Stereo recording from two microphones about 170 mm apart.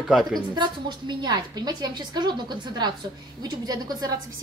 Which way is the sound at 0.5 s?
25° right (ahead or behind).